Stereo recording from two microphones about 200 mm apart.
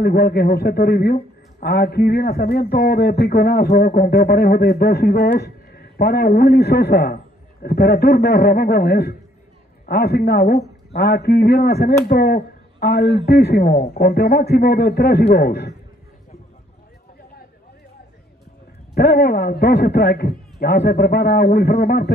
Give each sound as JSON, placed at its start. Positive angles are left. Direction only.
{"t": 0.0, "sound": "a man's voice", "side_deg": 50}
{"t": 18.9, "sound": "a man's voice", "side_deg": 55}